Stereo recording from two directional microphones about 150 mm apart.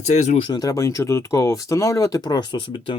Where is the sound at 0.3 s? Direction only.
30° left (ahead or behind).